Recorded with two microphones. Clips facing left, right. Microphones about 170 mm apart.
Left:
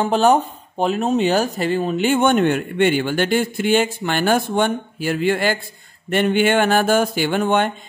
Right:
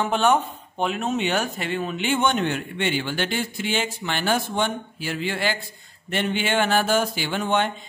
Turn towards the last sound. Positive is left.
turn(degrees=50)  # may be behind; listen again after turning